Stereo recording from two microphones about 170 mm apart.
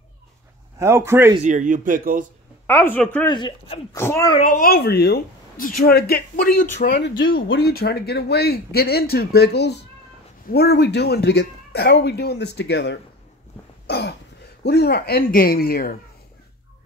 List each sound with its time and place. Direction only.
0.7 s speech: 15° right (ahead or behind)
1.4 s speech: 50° right (ahead or behind)
2.6 s a woman's voice: 15° left (ahead or behind)
3.3 s speech: 25° left (ahead or behind)
3.9 s a woman's voice: 15° left (ahead or behind)
4.4 s a woman's voice: 55° left (ahead or behind)
7.4 s speech: 80° left
13.8 s throat clearing: 75° left (ahead or behind)
14.6 s a woman's voice: 70° left (ahead or behind)